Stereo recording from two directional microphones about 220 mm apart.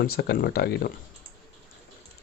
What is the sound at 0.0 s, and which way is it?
Speech, 45° left (ahead or behind).